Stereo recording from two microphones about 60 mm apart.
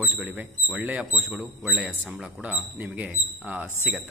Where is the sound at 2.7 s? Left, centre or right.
Right.